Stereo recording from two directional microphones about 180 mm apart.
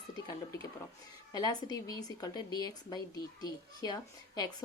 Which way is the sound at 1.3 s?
20° left (ahead or behind).